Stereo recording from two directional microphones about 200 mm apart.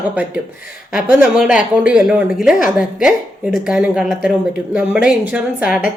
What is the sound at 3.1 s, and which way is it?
Speech, 5° right (ahead or behind).